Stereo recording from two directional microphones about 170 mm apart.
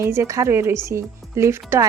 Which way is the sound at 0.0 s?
15° right (ahead or behind).